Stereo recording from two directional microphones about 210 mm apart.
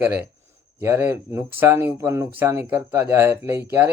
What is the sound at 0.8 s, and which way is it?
Speech, 10° right (ahead or behind).